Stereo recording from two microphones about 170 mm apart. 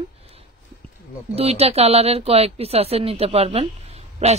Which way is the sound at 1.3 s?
35° right (ahead or behind).